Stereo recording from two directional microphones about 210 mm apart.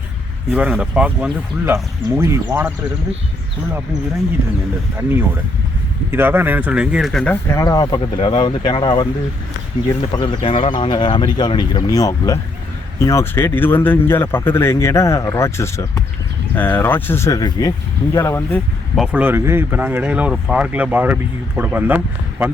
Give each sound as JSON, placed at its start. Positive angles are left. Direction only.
{"t": 0.5, "sound": "speech", "side_deg": -5}
{"t": 6.1, "sound": "speech", "side_deg": -10}
{"t": 7.5, "sound": "speech", "side_deg": 15}
{"t": 10.2, "sound": "speech", "side_deg": 25}
{"t": 18.9, "sound": "speech", "side_deg": -5}